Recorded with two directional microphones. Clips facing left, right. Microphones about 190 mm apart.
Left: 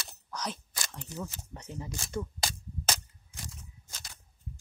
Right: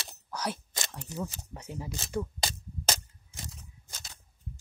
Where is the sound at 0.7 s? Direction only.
15° right (ahead or behind).